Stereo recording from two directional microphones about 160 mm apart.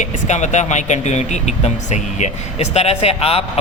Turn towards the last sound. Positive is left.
turn(degrees=40)  # may be behind; listen again after turning